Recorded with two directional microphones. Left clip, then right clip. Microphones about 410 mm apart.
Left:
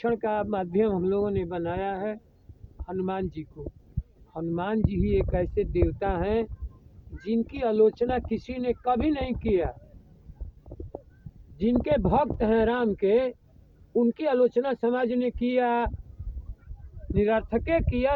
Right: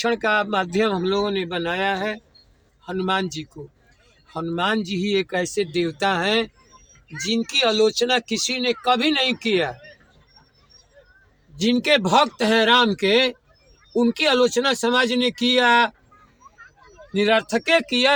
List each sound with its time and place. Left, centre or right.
0.0 s speech: left
11.5 s speech: left
17.2 s speech: left